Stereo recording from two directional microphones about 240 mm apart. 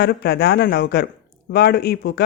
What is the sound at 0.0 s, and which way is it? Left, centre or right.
Speech, left.